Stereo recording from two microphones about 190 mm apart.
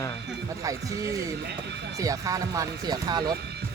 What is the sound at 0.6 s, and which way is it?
Speech, 15° right (ahead or behind).